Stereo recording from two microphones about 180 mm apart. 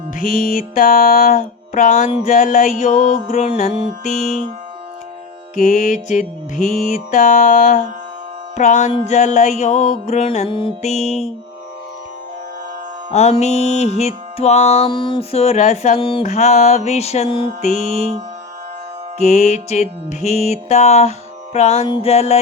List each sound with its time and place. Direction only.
0.2 s music: 50° left (ahead or behind)
5.5 s music: 50° left (ahead or behind)
13.1 s music: 40° left (ahead or behind)
16.2 s music: 40° left (ahead or behind)
17.8 s music: 35° right (ahead or behind)
19.2 s music: 40° left (ahead or behind)